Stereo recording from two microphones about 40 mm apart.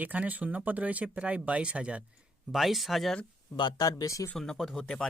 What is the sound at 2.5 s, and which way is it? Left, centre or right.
Speech, centre.